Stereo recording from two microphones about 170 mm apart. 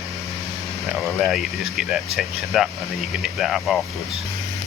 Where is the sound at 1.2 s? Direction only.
Centre (ahead or behind).